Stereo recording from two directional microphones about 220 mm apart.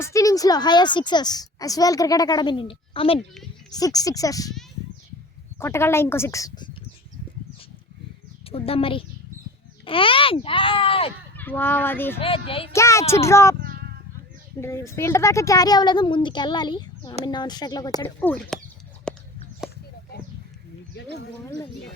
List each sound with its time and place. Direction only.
0.0 s a woman's voice: 15° left (ahead or behind)
5.5 s a woman's voice: 10° left (ahead or behind)
8.4 s speech: 25° left (ahead or behind)
11.3 s a woman's voice: 10° left (ahead or behind)
12.2 s speech: 25° left (ahead or behind)
12.7 s a woman's voice: 15° left (ahead or behind)
13.6 s a sound: 45° right (ahead or behind)
14.6 s a woman's voice: 10° left (ahead or behind)
19.1 s a sound: 5° left (ahead or behind)
20.1 s a sound: 45° left (ahead or behind)